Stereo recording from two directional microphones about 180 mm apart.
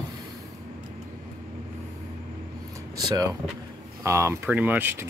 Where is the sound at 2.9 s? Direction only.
20° right (ahead or behind).